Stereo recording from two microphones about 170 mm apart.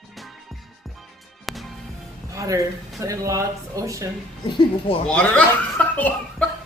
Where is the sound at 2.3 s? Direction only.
20° right (ahead or behind).